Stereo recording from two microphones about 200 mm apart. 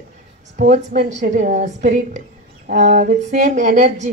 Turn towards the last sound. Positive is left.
turn(degrees=-35)  # may be behind; listen again after turning